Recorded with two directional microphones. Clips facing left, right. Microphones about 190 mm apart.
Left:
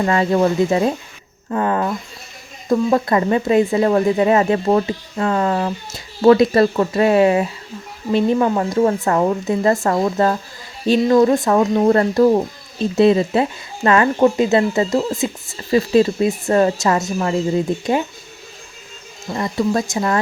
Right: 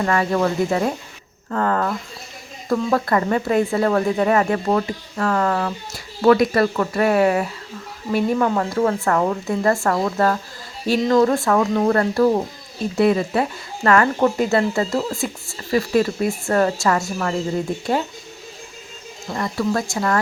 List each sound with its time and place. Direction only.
0.0 s speech: 20° left (ahead or behind)
19.3 s speech: 20° left (ahead or behind)